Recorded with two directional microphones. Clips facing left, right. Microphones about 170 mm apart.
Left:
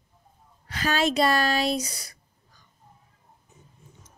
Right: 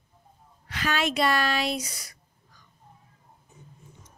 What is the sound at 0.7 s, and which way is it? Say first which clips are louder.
Speech: left 3 dB; 35° left (ahead or behind).